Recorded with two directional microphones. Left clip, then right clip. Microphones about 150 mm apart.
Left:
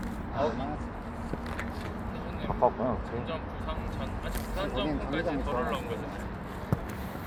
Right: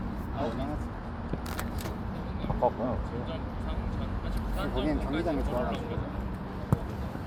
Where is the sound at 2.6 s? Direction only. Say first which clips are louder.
Left 2 dB; 70° left (ahead or behind).